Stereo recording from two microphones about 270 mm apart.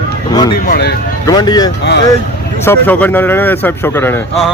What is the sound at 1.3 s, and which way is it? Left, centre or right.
Speech, centre.